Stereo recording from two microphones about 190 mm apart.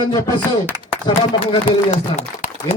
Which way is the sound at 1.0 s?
25° left (ahead or behind).